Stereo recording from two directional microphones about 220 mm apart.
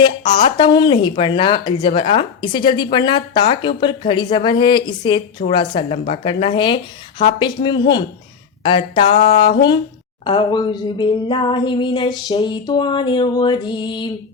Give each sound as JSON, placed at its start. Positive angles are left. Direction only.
{"t": 0.0, "sound": "speech", "side_deg": 20}